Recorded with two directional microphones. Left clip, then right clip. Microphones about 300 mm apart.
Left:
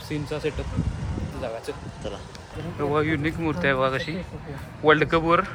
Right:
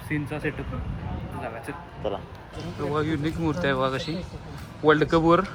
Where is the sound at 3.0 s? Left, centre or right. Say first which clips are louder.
Left 3 dB; right.